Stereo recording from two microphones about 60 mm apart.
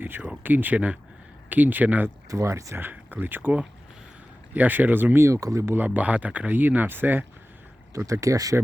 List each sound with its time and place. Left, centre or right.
0.2 s speech: right
2.3 s speech: right
2.7 s speech: right
5.2 s speech: right
5.6 s speech: right
7.9 s speech: right